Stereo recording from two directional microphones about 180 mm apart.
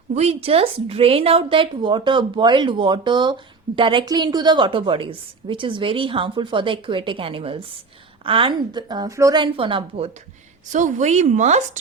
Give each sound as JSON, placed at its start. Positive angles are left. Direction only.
{"t": 0.1, "sound": "a woman's voice", "side_deg": -35}
{"t": 10.7, "sound": "speech", "side_deg": -45}